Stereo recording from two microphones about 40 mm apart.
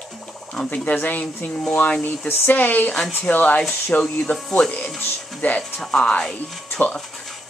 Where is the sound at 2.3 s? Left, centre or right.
Left.